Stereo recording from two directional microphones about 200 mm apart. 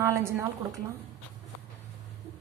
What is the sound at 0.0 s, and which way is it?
Speech, 15° right (ahead or behind).